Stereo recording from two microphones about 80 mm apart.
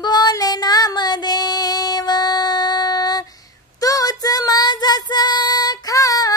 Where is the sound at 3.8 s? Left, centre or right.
Left.